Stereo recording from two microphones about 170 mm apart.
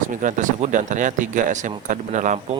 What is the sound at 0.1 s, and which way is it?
Speech, 50° right (ahead or behind).